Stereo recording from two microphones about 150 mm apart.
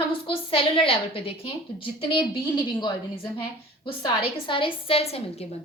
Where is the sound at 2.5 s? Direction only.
30° left (ahead or behind).